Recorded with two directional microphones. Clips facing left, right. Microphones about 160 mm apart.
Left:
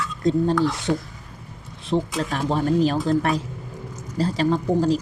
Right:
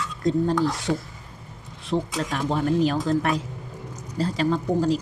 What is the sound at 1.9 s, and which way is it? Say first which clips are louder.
Speech: left 2 dB; 25° left (ahead or behind).